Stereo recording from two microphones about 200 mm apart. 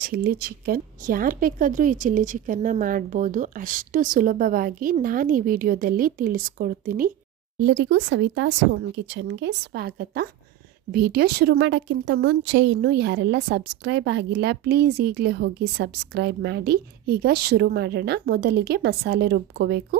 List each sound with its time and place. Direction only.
0.0 s speech: 50° right (ahead or behind)
7.6 s a woman's voice: 65° right (ahead or behind)